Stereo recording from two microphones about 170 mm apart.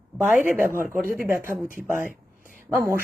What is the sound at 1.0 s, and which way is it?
Speech, 55° right (ahead or behind).